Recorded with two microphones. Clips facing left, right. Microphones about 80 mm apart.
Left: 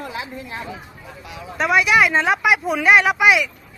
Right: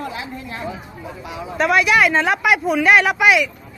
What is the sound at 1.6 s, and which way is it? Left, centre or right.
Speech, centre.